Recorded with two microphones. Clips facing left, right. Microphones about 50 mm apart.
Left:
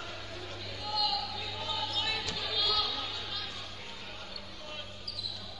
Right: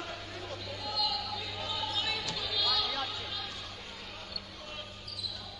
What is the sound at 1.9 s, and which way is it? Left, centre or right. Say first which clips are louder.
Music: even; centre.